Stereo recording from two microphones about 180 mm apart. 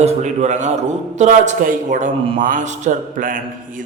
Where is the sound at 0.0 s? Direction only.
40° right (ahead or behind).